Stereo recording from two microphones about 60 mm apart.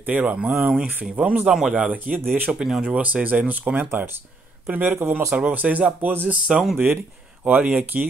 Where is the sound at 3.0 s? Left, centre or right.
Right.